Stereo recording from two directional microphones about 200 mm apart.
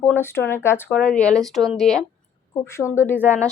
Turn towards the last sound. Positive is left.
turn(degrees=10)  # may be behind; listen again after turning